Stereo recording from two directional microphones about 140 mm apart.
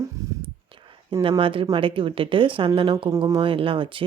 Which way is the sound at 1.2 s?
40° right (ahead or behind).